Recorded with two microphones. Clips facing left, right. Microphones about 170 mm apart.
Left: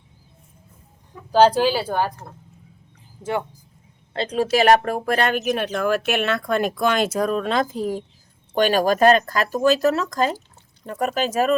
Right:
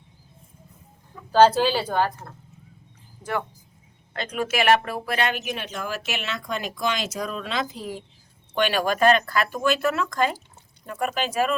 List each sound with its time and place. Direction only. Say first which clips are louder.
1.3 s a woman's voice: left 1 dB; 15° left (ahead or behind)
4.1 s speech: left 6 dB; 30° left (ahead or behind)